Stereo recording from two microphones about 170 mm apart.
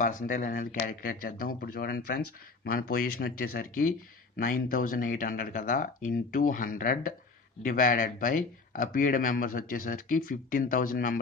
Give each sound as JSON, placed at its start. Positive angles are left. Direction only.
{"t": 0.0, "sound": "speech", "side_deg": 50}